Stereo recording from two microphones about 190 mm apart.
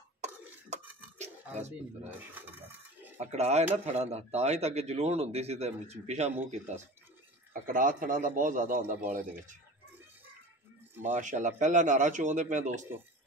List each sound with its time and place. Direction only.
2.0 s a sound: 10° right (ahead or behind)
3.2 s a man's voice: 35° right (ahead or behind)
7.6 s speech: 45° right (ahead or behind)
11.0 s a man's voice: 40° right (ahead or behind)